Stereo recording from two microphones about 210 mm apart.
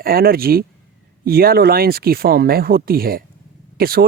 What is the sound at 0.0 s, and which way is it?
Speech, 45° right (ahead or behind).